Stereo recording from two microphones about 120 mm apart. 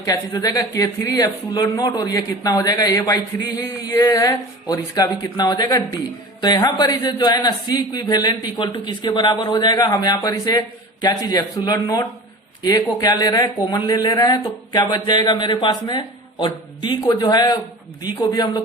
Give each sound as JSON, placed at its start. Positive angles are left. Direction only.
{"t": 0.0, "sound": "speech", "side_deg": 30}